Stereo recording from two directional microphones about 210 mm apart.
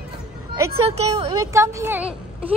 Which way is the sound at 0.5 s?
15° right (ahead or behind).